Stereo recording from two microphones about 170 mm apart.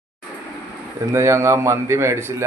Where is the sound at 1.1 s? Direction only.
15° right (ahead or behind).